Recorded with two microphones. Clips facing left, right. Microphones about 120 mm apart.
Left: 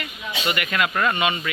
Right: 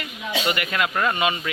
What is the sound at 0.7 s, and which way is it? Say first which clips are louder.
Speech: left 2 dB; 15° right (ahead or behind).